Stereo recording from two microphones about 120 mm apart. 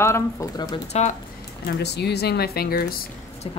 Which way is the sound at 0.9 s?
65° left (ahead or behind).